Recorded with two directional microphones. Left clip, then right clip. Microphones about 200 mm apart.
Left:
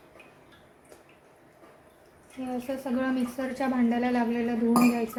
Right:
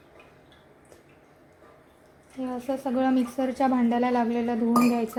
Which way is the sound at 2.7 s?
35° right (ahead or behind).